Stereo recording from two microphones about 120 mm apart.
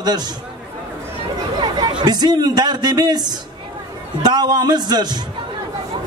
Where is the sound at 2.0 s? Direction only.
35° right (ahead or behind).